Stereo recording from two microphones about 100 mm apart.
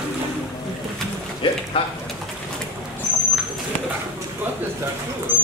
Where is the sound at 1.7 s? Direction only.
60° left (ahead or behind).